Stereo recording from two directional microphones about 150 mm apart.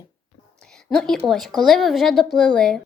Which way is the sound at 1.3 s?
Centre (ahead or behind).